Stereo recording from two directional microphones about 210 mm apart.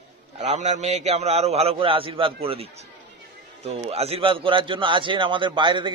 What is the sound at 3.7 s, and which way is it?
A man's voice, 30° right (ahead or behind).